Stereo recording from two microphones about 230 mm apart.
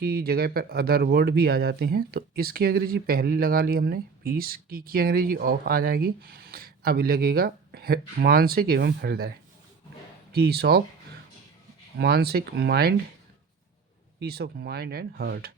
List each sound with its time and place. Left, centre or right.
0.0 s speech: right
10.3 s speech: right
11.9 s speech: right
14.2 s speech: right